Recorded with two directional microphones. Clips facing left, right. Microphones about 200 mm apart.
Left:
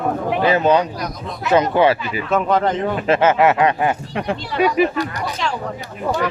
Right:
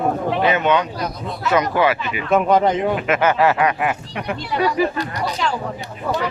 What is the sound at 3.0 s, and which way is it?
Speech, 30° left (ahead or behind).